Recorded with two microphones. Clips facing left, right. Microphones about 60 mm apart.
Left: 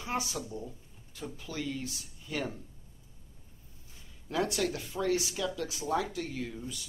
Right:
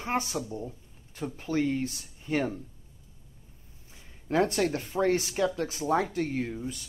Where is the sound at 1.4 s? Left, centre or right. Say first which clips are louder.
Right 10 dB; right.